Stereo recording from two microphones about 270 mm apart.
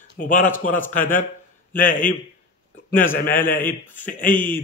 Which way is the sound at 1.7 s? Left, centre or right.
Left.